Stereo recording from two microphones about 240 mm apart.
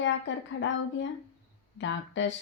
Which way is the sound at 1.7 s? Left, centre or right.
Left.